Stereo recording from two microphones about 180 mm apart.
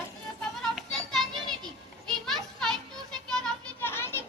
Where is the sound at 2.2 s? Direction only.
Centre (ahead or behind).